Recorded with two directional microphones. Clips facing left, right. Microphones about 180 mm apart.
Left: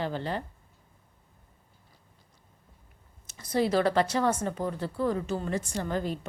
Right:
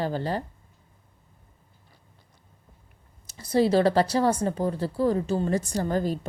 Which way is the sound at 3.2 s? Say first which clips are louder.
Right 5 dB; 30° right (ahead or behind).